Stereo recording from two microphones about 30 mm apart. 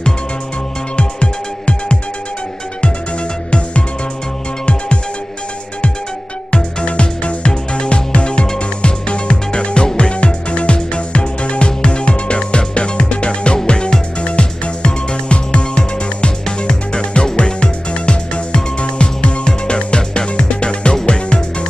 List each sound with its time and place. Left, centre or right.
0.9 s music: left
6.5 s music: left
14.2 s music: left